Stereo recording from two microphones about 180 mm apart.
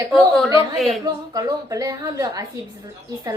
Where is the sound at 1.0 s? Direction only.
20° right (ahead or behind).